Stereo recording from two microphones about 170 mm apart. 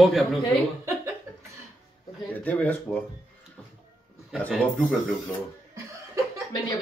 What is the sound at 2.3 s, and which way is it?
Speech, 10° left (ahead or behind).